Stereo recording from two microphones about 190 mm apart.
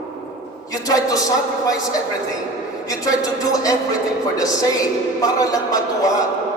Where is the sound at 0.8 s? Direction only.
20° left (ahead or behind).